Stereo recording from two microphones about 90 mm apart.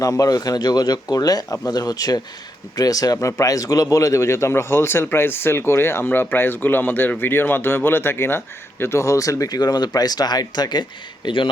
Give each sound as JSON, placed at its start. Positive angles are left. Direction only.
{"t": 0.0, "sound": "a man's voice", "side_deg": 40}